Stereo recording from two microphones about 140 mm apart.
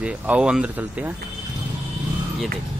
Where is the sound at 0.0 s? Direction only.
10° right (ahead or behind).